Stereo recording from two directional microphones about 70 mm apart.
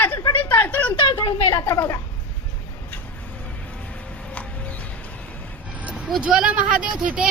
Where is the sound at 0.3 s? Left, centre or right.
Left.